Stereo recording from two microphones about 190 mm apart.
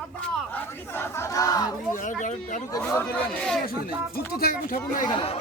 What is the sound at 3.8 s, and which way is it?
Speech, 50° left (ahead or behind).